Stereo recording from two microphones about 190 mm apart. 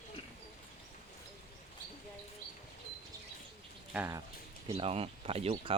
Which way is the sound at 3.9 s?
15° right (ahead or behind).